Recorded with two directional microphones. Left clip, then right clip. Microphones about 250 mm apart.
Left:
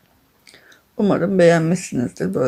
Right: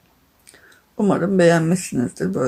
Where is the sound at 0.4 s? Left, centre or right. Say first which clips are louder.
Left 2 dB; centre.